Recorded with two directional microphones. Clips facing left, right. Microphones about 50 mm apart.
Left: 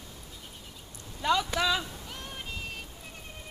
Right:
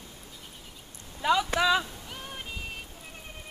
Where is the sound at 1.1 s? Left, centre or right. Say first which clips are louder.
Right 2 dB; centre.